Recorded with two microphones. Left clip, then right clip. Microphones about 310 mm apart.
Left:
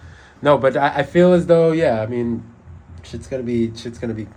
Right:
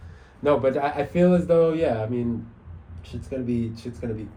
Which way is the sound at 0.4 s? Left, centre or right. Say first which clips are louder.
Left 6 dB; left.